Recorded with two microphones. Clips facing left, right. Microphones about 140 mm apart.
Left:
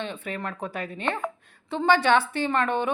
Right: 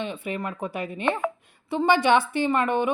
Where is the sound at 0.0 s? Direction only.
10° right (ahead or behind).